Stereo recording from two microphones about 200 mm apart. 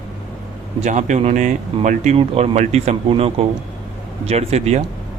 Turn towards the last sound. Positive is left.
turn(degrees=-35)  # may be behind; listen again after turning